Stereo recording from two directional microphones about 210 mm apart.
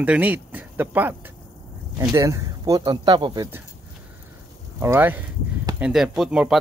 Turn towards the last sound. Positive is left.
turn(degrees=0)  # may be behind; listen again after turning